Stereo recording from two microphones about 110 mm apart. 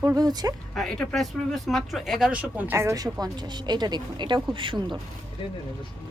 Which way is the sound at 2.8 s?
30° right (ahead or behind).